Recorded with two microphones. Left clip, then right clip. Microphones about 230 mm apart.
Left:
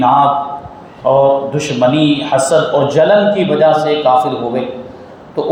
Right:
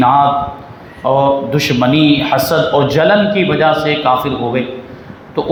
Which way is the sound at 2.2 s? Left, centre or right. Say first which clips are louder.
Left 1 dB; right.